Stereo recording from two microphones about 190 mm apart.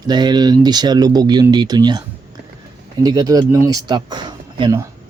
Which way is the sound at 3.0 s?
20° right (ahead or behind).